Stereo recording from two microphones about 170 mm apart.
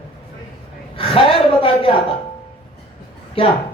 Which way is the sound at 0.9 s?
35° left (ahead or behind).